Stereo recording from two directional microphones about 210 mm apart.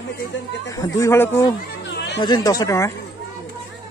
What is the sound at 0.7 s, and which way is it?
Speech, 15° left (ahead or behind).